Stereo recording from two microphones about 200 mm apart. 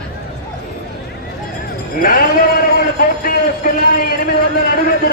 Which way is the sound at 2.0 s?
45° left (ahead or behind).